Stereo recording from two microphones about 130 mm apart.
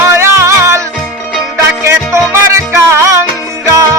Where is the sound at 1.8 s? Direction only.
20° right (ahead or behind).